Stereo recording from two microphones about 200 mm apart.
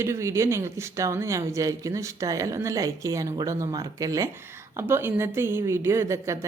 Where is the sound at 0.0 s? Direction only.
15° right (ahead or behind).